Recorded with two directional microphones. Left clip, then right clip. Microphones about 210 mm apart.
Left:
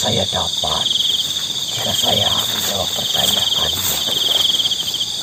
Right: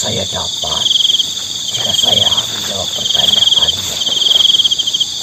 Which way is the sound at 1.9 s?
15° right (ahead or behind).